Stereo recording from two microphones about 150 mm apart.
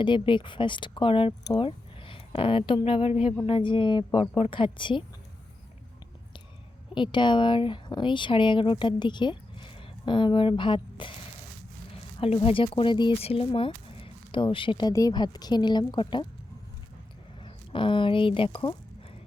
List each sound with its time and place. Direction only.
0.0 s speech: 35° left (ahead or behind)
6.9 s speech: 30° left (ahead or behind)
12.2 s speech: 40° left (ahead or behind)
17.4 s speech: 35° left (ahead or behind)